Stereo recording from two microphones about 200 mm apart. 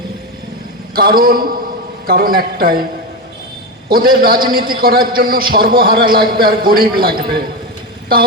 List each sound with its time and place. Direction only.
0.9 s a man's voice: 45° right (ahead or behind)
3.8 s a man's voice: 45° right (ahead or behind)